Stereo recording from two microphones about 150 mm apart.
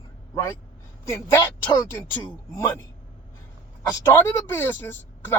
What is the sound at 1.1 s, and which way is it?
Speech, 20° left (ahead or behind).